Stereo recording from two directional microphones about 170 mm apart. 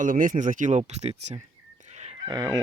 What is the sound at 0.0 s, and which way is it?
Speech, 50° right (ahead or behind).